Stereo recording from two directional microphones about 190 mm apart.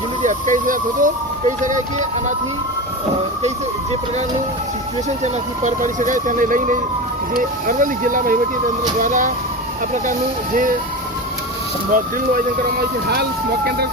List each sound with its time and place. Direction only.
0.2 s speech: 40° right (ahead or behind)
5.2 s speech: 40° right (ahead or behind)
11.9 s speech: 45° right (ahead or behind)